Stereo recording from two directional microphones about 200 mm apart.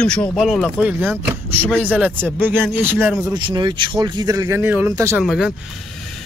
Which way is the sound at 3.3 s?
20° right (ahead or behind).